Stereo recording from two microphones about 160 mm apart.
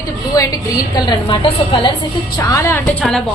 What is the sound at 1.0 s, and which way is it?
Speech, 30° left (ahead or behind).